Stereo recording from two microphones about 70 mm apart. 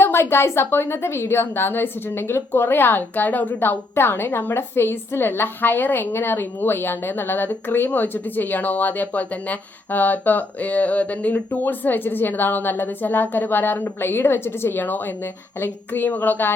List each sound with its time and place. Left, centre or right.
0.0 s a woman's voice: left